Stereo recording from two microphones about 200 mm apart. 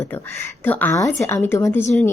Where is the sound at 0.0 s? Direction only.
10° left (ahead or behind).